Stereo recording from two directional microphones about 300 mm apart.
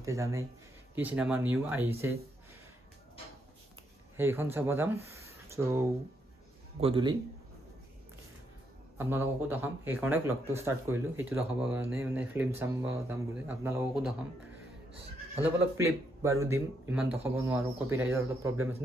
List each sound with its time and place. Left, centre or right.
0.0 s speech: centre
4.2 s speech: centre
8.9 s speech: centre
15.3 s speech: centre